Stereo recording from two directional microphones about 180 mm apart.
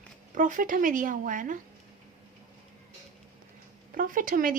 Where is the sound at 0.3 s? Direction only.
45° right (ahead or behind).